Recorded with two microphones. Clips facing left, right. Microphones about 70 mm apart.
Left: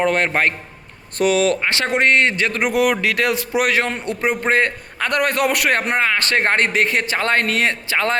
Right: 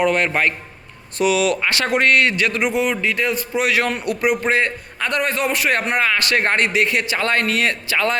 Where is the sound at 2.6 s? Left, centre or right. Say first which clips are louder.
Left 2 dB; left.